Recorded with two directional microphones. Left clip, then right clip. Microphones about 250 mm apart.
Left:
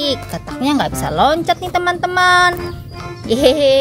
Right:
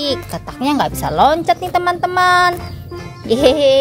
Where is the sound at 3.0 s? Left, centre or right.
Centre.